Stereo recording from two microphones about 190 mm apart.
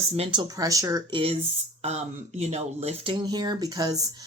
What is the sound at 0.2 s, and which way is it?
Speech, 25° right (ahead or behind).